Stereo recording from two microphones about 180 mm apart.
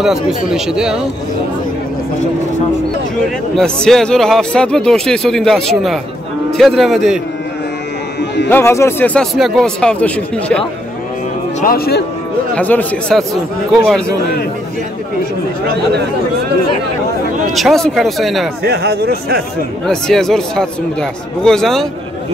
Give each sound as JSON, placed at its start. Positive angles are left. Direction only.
{"t": 0.0, "sound": "speech", "side_deg": 0}
{"t": 3.5, "sound": "speech", "side_deg": 5}
{"t": 8.5, "sound": "speech", "side_deg": 10}
{"t": 11.6, "sound": "speech", "side_deg": 60}
{"t": 12.5, "sound": "speech", "side_deg": 10}
{"t": 17.5, "sound": "speech", "side_deg": 0}
{"t": 18.6, "sound": "speech", "side_deg": -65}
{"t": 19.9, "sound": "speech", "side_deg": 5}